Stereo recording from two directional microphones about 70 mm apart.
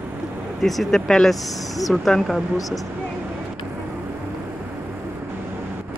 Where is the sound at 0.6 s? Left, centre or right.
Centre.